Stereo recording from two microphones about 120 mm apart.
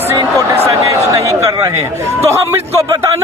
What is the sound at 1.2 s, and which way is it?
Speech, 30° right (ahead or behind).